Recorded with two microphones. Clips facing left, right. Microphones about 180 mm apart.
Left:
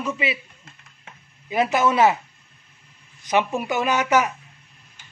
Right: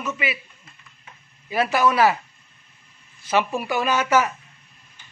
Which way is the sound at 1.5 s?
20° left (ahead or behind).